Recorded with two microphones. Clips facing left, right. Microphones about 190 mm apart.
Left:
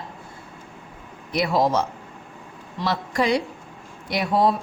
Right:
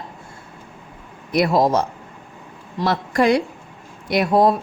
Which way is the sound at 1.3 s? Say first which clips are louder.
Right 4 dB; 50° right (ahead or behind).